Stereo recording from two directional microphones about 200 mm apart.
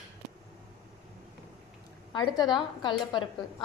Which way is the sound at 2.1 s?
20° left (ahead or behind).